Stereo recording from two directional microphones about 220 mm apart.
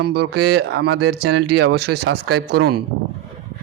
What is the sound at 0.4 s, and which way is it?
Speech, 50° right (ahead or behind).